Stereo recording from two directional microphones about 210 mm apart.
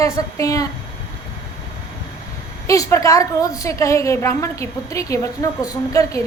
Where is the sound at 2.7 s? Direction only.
15° left (ahead or behind).